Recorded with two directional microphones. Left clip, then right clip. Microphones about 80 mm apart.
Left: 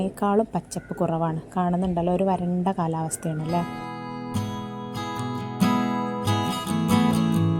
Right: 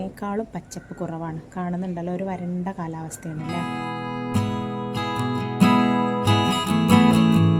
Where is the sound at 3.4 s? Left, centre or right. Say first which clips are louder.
Right 1 dB; right.